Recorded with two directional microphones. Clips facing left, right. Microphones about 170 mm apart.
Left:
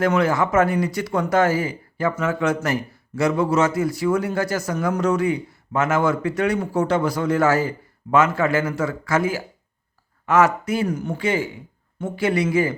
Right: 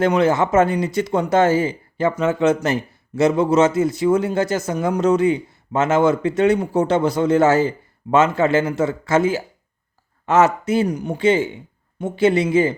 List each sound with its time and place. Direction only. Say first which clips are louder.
0.0 s speech: right 3 dB; 25° right (ahead or behind)